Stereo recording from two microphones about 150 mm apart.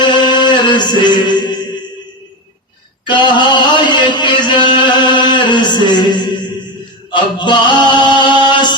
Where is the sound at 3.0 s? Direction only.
30° left (ahead or behind).